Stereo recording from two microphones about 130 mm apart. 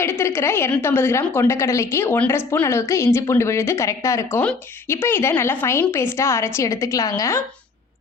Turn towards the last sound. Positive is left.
turn(degrees=25)  # may be behind; listen again after turning